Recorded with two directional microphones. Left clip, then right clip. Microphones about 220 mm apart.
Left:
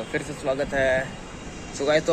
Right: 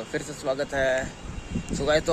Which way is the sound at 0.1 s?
25° right (ahead or behind).